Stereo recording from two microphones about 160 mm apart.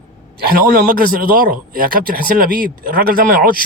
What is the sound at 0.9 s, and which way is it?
Speech, 65° right (ahead or behind).